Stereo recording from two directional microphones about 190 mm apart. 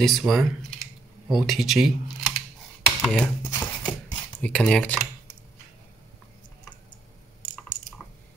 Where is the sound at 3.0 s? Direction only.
5° left (ahead or behind).